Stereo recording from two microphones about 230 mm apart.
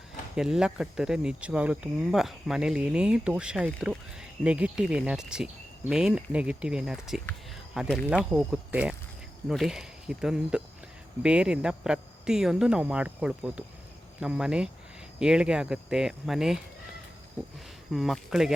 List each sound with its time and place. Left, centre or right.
0.3 s speech: centre
17.9 s speech: centre